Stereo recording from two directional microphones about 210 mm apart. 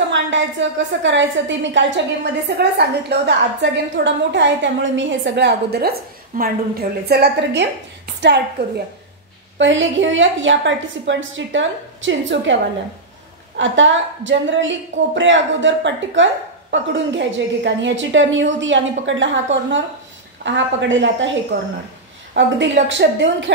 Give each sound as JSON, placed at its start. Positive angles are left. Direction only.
{"t": 0.1, "sound": "a woman's voice", "side_deg": -60}
{"t": 9.6, "sound": "a woman's voice", "side_deg": -60}
{"t": 13.6, "sound": "a woman's voice", "side_deg": -60}